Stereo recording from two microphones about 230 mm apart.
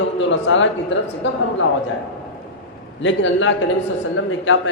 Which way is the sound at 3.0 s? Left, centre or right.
Left.